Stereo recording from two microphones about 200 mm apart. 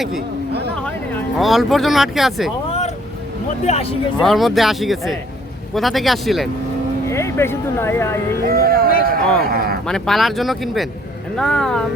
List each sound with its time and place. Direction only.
1.4 s speech: centre (ahead or behind)
3.7 s speech: 30° left (ahead or behind)
4.2 s speech: centre (ahead or behind)
7.1 s speech: 15° left (ahead or behind)
8.4 s music: 50° right (ahead or behind)
9.0 s a sound: 45° right (ahead or behind)
9.4 s speech: 50° right (ahead or behind)
9.8 s speech: centre (ahead or behind)